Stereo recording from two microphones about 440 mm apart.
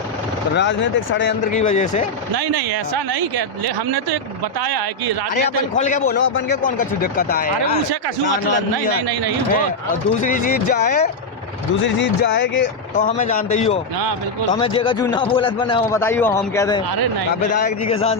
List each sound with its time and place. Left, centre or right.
0.5 s speech: left
2.3 s speech: right
4.6 s speech: right
5.3 s speech: centre
10.2 s a man's voice: centre